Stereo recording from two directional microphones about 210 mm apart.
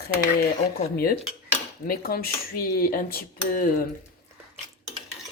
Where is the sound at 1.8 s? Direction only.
45° left (ahead or behind).